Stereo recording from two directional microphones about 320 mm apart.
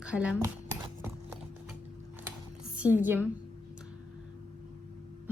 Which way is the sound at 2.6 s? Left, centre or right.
Centre.